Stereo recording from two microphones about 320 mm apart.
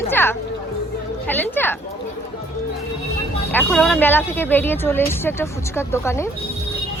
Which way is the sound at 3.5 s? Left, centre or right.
Centre.